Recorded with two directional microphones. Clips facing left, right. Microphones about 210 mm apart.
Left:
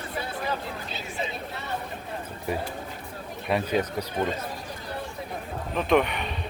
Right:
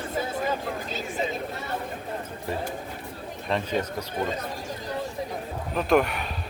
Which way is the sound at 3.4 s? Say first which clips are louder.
Left 2 dB; 10° left (ahead or behind).